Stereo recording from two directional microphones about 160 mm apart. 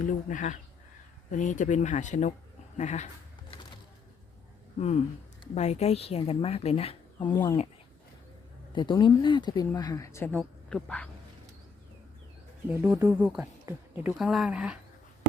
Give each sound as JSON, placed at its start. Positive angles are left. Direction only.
{"t": 0.0, "sound": "speech", "side_deg": 55}
{"t": 4.8, "sound": "a woman's voice", "side_deg": 45}
{"t": 8.7, "sound": "speech", "side_deg": 30}
{"t": 10.3, "sound": "speech", "side_deg": 5}
{"t": 12.6, "sound": "speech", "side_deg": -10}